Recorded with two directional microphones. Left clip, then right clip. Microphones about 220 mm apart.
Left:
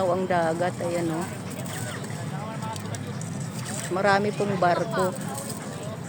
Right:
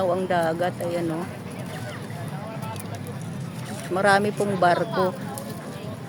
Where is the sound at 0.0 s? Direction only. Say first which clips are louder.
Right 1 dB; 5° right (ahead or behind).